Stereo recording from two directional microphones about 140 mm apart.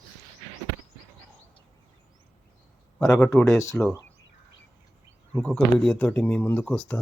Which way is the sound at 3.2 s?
10° left (ahead or behind).